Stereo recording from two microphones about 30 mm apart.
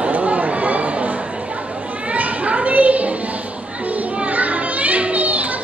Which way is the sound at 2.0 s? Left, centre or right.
Right.